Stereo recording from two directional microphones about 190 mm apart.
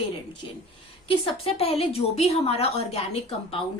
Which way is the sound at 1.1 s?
30° left (ahead or behind).